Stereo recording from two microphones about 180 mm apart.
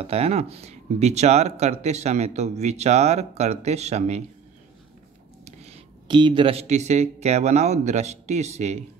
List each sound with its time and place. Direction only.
0.0 s speech: 35° right (ahead or behind)
5.4 s speech: 30° right (ahead or behind)